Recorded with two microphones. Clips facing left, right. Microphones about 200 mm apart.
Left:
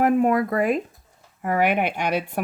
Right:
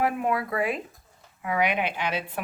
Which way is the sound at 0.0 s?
45° left (ahead or behind).